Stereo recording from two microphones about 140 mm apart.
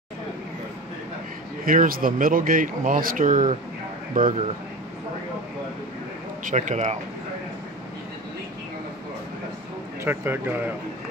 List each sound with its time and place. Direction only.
1.7 s speech: 85° right; by 4.4 s 65° right (ahead or behind)
6.4 s speech: 60° right (ahead or behind)
10.0 s speech: 15° right (ahead or behind)